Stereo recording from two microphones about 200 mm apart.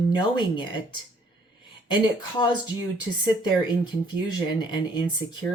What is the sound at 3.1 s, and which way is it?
Speech, 10° left (ahead or behind).